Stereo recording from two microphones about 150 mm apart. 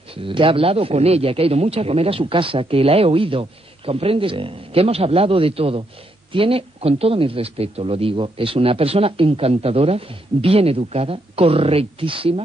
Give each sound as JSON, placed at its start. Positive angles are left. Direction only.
{"t": 0.1, "sound": "speech", "side_deg": -35}